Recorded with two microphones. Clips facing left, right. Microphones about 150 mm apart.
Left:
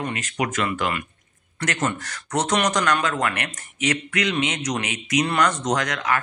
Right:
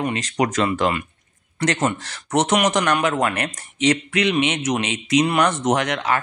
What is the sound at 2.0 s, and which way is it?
Speech, 25° right (ahead or behind).